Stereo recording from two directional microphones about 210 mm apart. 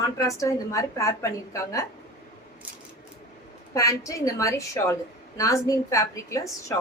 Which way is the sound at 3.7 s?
15° left (ahead or behind).